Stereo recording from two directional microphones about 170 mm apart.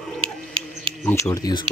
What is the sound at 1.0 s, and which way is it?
Speech, 15° left (ahead or behind).